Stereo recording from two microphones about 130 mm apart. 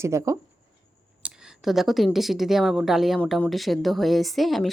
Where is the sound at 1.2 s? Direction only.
5° right (ahead or behind).